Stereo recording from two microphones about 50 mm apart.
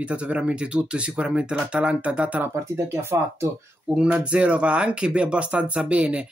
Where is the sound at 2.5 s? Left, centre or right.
Right.